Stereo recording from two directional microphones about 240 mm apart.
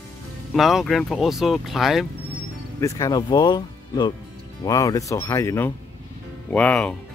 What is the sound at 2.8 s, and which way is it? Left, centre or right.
Speech, centre.